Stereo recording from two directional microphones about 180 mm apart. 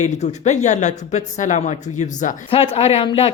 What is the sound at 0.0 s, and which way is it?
A woman's voice, 40° left (ahead or behind).